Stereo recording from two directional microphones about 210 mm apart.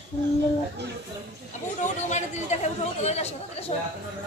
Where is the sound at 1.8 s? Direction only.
35° left (ahead or behind).